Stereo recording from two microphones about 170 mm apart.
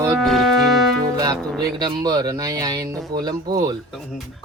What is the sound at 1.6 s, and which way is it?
Speech, 25° right (ahead or behind).